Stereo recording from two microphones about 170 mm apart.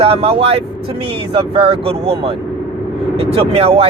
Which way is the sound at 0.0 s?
35° right (ahead or behind).